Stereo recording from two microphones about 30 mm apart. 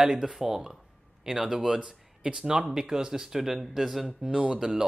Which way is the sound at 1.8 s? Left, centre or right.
Right.